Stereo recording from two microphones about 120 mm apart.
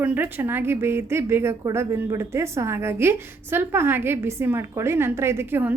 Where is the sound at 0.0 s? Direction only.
15° right (ahead or behind).